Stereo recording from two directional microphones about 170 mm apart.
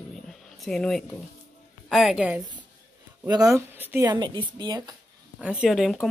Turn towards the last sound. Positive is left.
turn(degrees=0)  # may be behind; listen again after turning